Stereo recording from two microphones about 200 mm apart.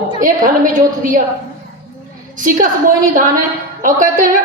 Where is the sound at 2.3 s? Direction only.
40° right (ahead or behind).